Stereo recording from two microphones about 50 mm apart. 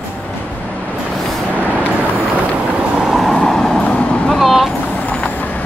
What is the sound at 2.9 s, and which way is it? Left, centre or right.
Vehicle, centre.